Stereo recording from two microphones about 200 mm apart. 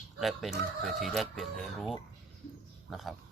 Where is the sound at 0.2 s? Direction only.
Centre (ahead or behind).